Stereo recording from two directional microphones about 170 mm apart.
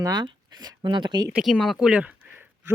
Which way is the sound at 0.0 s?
25° right (ahead or behind).